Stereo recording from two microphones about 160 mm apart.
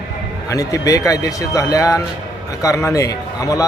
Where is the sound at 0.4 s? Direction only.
20° left (ahead or behind).